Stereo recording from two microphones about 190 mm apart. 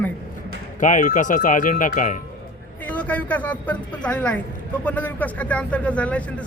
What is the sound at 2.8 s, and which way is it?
Speech, 10° left (ahead or behind).